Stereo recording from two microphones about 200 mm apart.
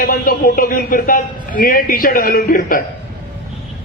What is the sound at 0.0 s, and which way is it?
Speech, 45° left (ahead or behind).